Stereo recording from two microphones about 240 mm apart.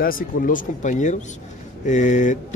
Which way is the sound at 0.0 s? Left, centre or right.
Left.